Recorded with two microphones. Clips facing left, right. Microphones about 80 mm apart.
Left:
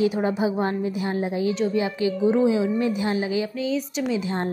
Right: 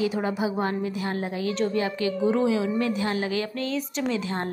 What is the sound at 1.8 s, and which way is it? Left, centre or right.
A woman's voice, centre.